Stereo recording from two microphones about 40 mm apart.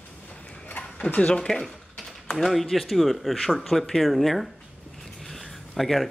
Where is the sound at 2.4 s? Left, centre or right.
Centre.